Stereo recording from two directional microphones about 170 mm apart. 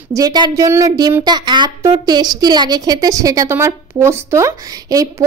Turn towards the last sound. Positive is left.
turn(degrees=-20)  # may be behind; listen again after turning